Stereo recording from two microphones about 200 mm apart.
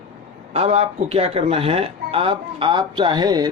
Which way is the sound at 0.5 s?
30° right (ahead or behind).